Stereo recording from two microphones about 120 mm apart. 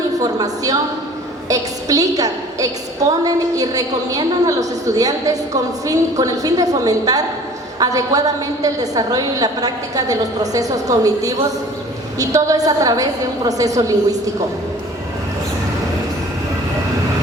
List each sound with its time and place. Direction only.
0.2 s a woman's voice: 30° right (ahead or behind)